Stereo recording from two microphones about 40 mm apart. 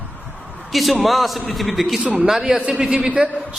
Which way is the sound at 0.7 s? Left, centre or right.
Centre.